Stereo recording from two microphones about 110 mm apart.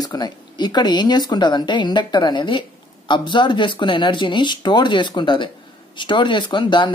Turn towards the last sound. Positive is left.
turn(degrees=45)  # may be behind; listen again after turning